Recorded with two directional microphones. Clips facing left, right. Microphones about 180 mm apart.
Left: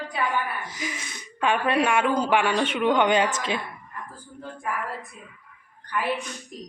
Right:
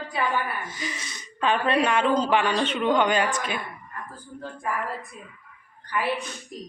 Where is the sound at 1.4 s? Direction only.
10° left (ahead or behind).